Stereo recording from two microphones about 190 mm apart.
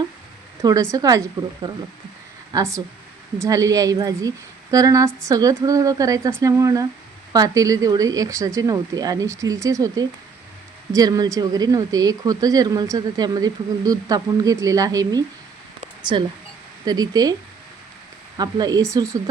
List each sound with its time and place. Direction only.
0.6 s a woman's voice: 15° right (ahead or behind)
18.3 s speech: 20° right (ahead or behind)